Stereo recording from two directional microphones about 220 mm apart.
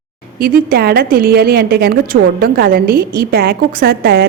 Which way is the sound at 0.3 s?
45° right (ahead or behind).